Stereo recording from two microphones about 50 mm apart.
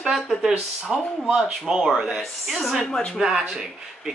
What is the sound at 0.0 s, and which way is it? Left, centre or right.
A woman's voice, centre.